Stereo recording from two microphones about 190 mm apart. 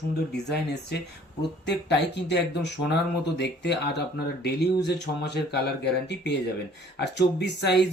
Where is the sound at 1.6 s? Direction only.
65° left (ahead or behind).